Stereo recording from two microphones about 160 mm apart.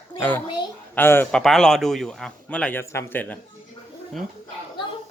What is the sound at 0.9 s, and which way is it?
Speech, 15° left (ahead or behind).